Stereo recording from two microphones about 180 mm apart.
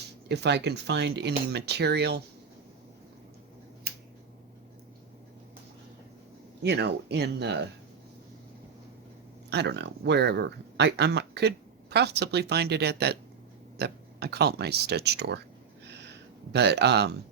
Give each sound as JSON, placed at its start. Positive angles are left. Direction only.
{"t": 0.3, "sound": "speech", "side_deg": -70}
{"t": 6.6, "sound": "speech", "side_deg": -70}
{"t": 9.5, "sound": "speech", "side_deg": -70}
{"t": 15.9, "sound": "a sound", "side_deg": -70}